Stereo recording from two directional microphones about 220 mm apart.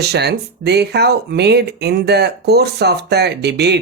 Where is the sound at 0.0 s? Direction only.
50° right (ahead or behind).